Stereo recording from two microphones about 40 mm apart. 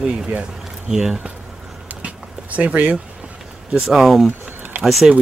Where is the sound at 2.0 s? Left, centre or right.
Right.